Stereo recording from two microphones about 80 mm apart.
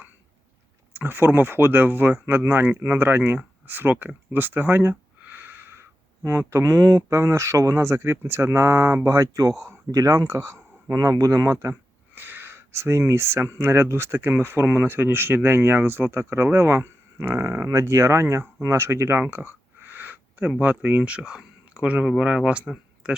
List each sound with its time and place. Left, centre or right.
0.9 s speech: right
11.7 s a sound: right
13.6 s speech: right
17.7 s speech: right
19.3 s a sound: right
20.6 s speech: right